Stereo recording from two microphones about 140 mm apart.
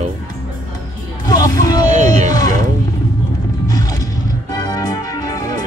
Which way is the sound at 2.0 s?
25° left (ahead or behind).